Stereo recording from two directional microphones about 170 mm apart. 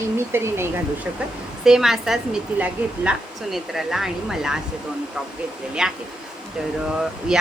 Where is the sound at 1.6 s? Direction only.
5° right (ahead or behind).